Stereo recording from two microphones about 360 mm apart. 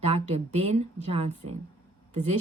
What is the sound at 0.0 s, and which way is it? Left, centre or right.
A woman's voice, centre.